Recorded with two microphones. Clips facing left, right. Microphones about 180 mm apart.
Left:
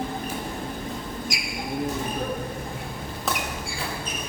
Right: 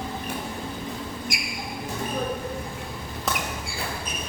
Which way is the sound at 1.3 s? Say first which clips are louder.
Even; 55° right (ahead or behind).